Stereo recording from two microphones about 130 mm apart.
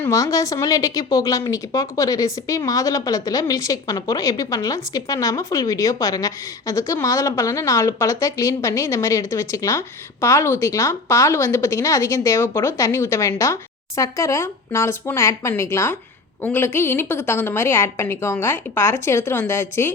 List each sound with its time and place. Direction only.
0.0 s a woman's voice: 25° left (ahead or behind)